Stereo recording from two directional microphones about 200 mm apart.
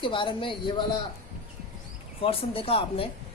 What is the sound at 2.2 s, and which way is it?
Speech, 30° left (ahead or behind).